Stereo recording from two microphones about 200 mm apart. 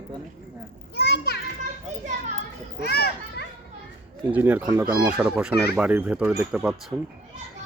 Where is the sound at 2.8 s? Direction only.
50° left (ahead or behind).